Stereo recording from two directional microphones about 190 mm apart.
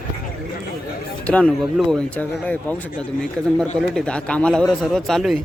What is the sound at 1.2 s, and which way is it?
A man's voice, 5° left (ahead or behind).